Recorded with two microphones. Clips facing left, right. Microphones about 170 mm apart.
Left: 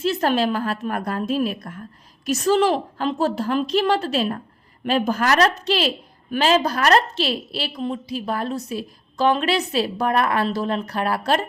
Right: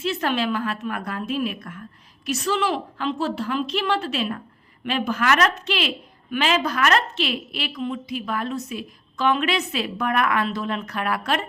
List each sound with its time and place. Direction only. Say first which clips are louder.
0.0 s a woman's voice: left 4 dB; 40° left (ahead or behind)